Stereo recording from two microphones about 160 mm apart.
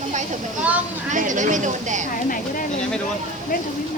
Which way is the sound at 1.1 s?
50° right (ahead or behind).